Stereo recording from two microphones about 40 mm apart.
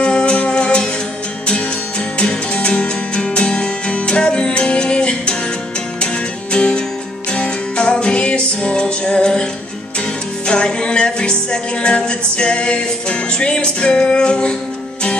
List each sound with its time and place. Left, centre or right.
0.0 s music: left
2.1 s music: left
6.5 s music: left